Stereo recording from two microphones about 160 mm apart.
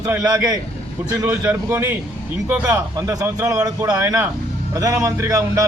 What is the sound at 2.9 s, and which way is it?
A man's voice, 20° right (ahead or behind).